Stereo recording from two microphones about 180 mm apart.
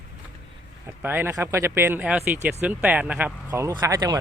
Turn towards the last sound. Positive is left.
turn(degrees=-20)  # may be behind; listen again after turning